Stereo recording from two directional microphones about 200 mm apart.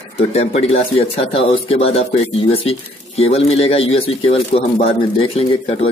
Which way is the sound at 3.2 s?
30° left (ahead or behind).